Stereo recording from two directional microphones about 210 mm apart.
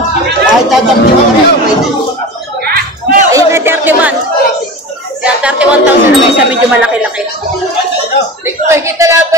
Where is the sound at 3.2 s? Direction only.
15° right (ahead or behind).